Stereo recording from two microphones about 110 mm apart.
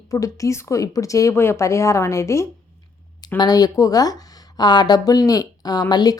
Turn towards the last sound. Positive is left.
turn(degrees=40)  # may be behind; listen again after turning